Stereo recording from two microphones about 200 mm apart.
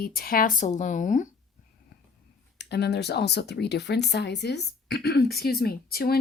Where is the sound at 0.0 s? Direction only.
50° left (ahead or behind).